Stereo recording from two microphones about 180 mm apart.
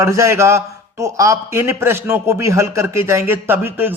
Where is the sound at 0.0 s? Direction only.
15° right (ahead or behind).